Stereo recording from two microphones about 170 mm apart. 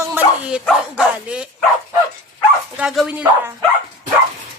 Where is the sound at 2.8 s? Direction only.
5° right (ahead or behind).